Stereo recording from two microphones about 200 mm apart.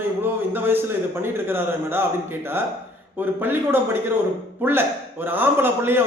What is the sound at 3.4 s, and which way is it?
Speech, 10° right (ahead or behind).